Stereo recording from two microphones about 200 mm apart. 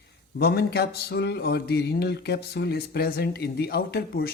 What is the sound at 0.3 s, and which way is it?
A man's voice, 50° left (ahead or behind).